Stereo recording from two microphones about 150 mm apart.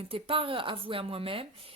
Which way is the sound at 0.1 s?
40° right (ahead or behind).